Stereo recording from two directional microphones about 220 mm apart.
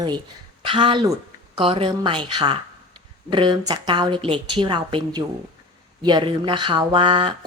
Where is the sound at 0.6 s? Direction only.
20° right (ahead or behind).